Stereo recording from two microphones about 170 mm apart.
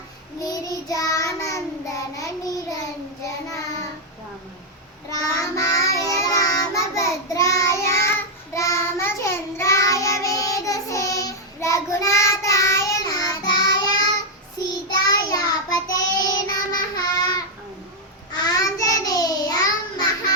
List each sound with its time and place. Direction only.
0.3 s child singing: 20° left (ahead or behind)
5.1 s child singing: 20° left (ahead or behind)
15.1 s child singing: 20° left (ahead or behind)